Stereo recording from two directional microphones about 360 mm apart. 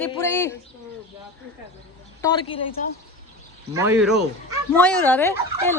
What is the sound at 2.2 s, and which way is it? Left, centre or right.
Speech, centre.